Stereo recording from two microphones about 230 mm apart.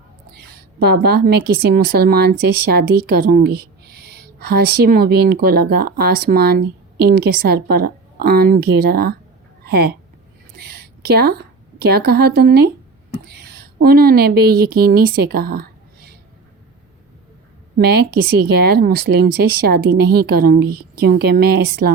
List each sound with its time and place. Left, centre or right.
0.4 s a woman's voice: right
10.6 s a sound: right
11.8 s speech: right
17.7 s speech: right